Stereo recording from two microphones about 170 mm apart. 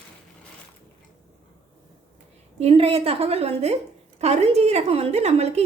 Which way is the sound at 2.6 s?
35° right (ahead or behind).